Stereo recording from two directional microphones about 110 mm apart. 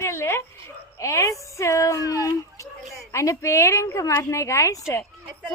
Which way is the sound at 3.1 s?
30° left (ahead or behind).